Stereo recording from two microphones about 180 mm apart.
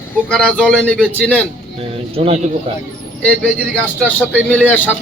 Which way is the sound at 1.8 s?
35° right (ahead or behind).